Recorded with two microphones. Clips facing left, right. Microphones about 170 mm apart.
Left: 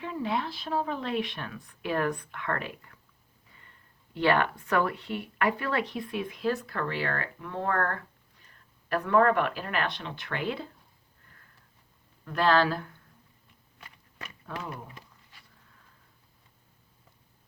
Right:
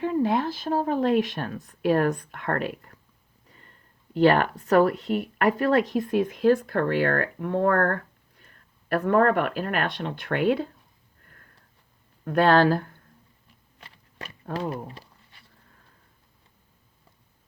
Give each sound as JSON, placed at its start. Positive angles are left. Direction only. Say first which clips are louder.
{"t": 0.0, "sound": "speech", "louder": "right 8 dB", "side_deg": -45}
{"t": 12.2, "sound": "speech", "louder": "right 6 dB", "side_deg": -50}
{"t": 13.7, "sound": "biting", "louder": "right 4 dB", "side_deg": -30}